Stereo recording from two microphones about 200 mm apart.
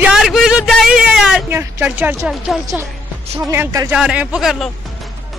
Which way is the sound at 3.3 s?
10° right (ahead or behind).